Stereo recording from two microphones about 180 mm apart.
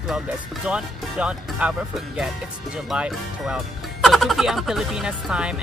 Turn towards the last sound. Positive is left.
turn(degrees=-5)  # may be behind; listen again after turning